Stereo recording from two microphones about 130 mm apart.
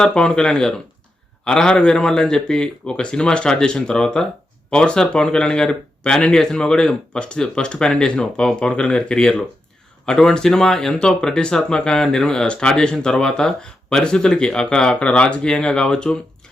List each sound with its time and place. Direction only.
0.0 s speech: 5° left (ahead or behind)